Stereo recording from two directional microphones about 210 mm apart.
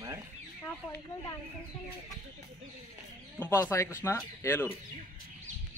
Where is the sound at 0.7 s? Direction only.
10° left (ahead or behind).